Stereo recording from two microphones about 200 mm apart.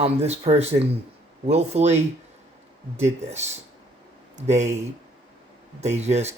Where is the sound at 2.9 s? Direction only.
35° right (ahead or behind).